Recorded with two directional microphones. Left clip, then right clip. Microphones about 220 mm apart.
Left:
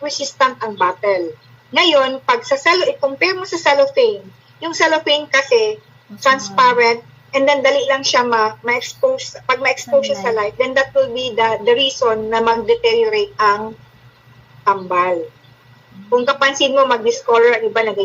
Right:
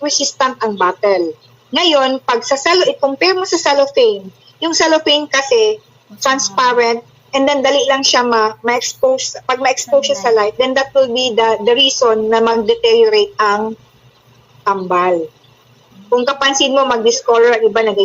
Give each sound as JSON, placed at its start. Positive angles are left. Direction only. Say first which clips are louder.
{"t": 0.0, "sound": "a woman's voice", "louder": "right 2 dB", "side_deg": -20}